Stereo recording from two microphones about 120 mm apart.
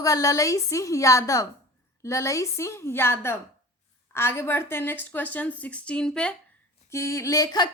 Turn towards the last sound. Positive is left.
turn(degrees=35)  # may be behind; listen again after turning